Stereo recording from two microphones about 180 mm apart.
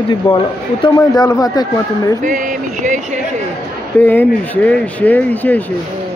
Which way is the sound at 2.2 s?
45° right (ahead or behind).